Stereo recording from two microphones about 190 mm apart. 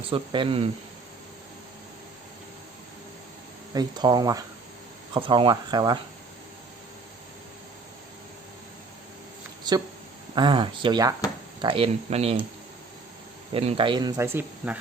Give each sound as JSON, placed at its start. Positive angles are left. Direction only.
{"t": 0.1, "sound": "speech", "side_deg": -25}
{"t": 3.8, "sound": "speech", "side_deg": -20}
{"t": 10.3, "sound": "speech", "side_deg": -25}
{"t": 13.5, "sound": "speech", "side_deg": -30}